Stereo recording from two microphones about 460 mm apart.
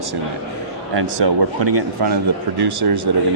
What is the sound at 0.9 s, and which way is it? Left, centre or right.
Speech, right.